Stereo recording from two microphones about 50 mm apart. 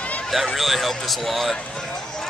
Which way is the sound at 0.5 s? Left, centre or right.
Centre.